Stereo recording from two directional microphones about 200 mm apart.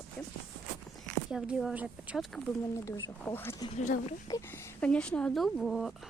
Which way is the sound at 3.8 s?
40° left (ahead or behind).